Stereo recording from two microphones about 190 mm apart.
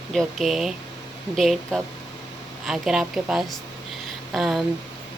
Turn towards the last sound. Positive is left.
turn(degrees=0)  # may be behind; listen again after turning